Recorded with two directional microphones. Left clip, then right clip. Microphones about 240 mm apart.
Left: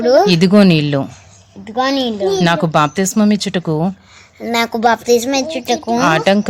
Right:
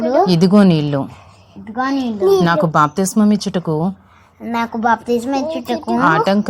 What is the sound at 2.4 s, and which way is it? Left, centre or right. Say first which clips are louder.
A woman's voice: even; left.